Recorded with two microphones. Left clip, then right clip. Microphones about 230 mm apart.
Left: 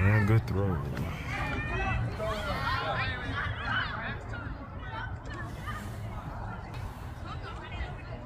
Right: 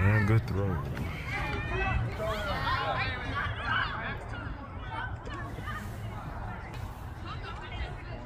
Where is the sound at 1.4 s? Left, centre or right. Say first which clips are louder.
Even; centre.